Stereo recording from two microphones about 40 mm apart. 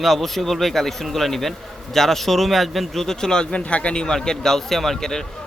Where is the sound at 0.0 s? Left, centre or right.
Centre; by 3.6 s left.